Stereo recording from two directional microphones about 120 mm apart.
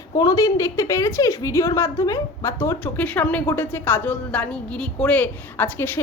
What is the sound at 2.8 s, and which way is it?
Speech, 15° left (ahead or behind).